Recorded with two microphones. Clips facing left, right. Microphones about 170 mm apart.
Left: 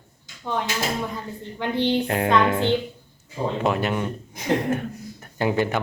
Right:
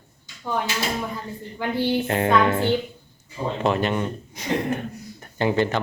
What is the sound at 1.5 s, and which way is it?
Speech, 5° right (ahead or behind).